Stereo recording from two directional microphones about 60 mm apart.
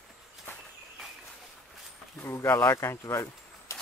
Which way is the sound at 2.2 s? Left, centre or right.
Left.